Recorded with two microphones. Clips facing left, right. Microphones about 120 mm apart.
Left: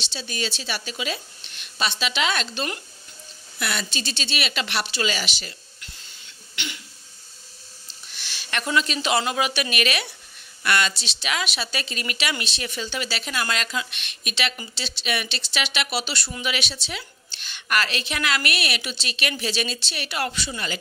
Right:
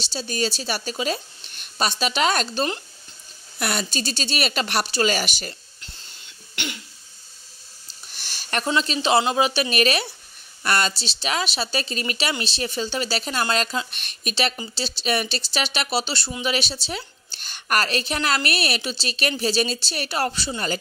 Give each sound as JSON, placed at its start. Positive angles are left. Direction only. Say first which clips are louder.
{"t": 0.0, "sound": "speech", "louder": "right 5 dB", "side_deg": -40}
{"t": 8.1, "sound": "a sound", "louder": "right 3 dB", "side_deg": -40}
{"t": 8.6, "sound": "speech", "louder": "right 2 dB", "side_deg": -30}